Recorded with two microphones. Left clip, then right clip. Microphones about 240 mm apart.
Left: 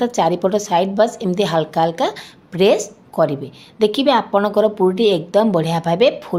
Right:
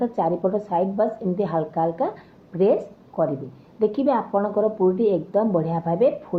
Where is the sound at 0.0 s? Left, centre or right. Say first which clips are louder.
Left 6 dB; left.